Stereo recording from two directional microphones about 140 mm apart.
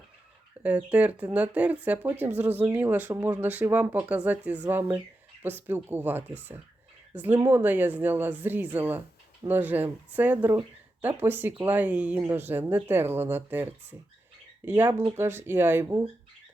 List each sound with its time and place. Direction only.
0.9 s speech: 10° right (ahead or behind)